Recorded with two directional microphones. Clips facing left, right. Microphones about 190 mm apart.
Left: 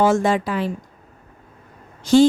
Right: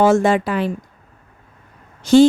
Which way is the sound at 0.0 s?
70° right (ahead or behind).